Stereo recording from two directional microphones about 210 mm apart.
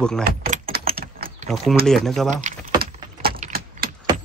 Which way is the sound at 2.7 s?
45° right (ahead or behind).